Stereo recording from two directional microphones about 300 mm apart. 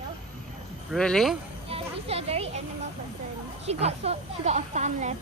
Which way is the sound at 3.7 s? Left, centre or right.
Right.